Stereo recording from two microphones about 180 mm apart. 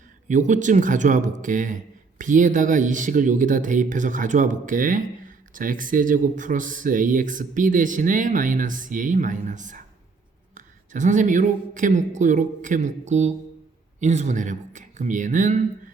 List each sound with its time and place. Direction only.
0.3 s speech: 45° right (ahead or behind)